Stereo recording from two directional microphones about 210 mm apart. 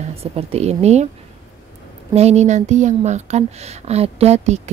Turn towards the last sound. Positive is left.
turn(degrees=-30)  # may be behind; listen again after turning